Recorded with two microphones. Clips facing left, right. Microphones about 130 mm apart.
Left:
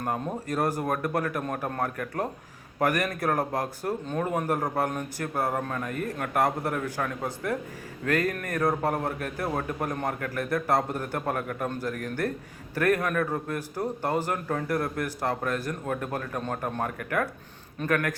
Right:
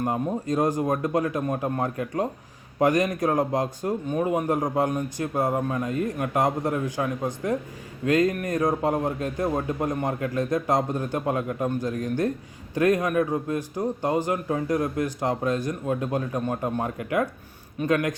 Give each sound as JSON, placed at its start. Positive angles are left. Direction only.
{"t": 0.0, "sound": "a man's voice", "side_deg": -20}